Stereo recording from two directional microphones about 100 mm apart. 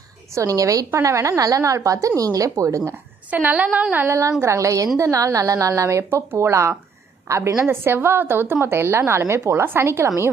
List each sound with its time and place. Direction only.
0.3 s speech: 35° right (ahead or behind)
2.9 s a woman's voice: 15° right (ahead or behind)
3.9 s a woman's voice: 25° right (ahead or behind)